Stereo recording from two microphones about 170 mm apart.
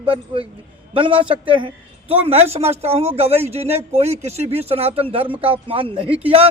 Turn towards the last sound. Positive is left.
turn(degrees=-35)  # may be behind; listen again after turning